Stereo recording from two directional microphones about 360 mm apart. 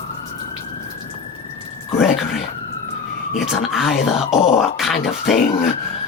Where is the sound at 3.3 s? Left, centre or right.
Centre.